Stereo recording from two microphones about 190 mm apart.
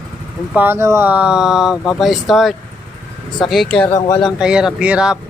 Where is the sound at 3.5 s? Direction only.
Centre (ahead or behind).